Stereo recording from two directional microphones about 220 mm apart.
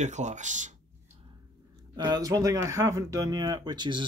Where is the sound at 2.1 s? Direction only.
15° right (ahead or behind).